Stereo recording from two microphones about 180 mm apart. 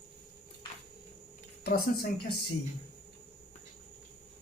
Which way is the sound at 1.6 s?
60° left (ahead or behind).